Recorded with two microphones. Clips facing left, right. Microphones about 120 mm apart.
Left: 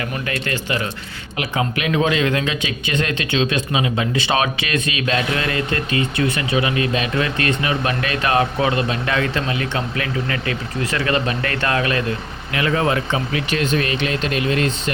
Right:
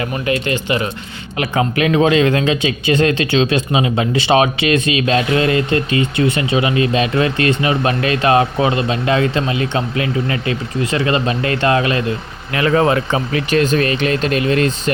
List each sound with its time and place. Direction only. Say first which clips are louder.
0.3 s speech: right 8 dB; 20° right (ahead or behind)
1.7 s speech: right 7 dB; 35° right (ahead or behind)
12.5 s speech: right 5 dB; 40° right (ahead or behind)